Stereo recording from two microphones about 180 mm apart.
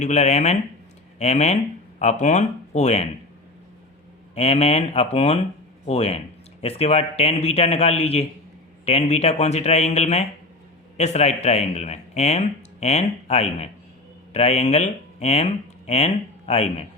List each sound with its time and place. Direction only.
0.0 s speech: 40° left (ahead or behind)
4.4 s speech: 35° left (ahead or behind)